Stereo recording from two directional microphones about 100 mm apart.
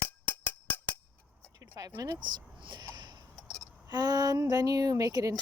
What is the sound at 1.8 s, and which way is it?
Speech, 35° right (ahead or behind).